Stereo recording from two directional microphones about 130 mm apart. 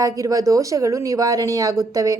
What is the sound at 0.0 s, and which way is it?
Speech, 25° right (ahead or behind).